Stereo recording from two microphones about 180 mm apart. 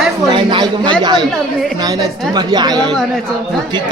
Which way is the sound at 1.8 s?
20° right (ahead or behind).